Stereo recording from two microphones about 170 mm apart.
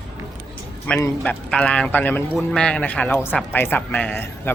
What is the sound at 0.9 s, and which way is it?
Speech, 10° left (ahead or behind).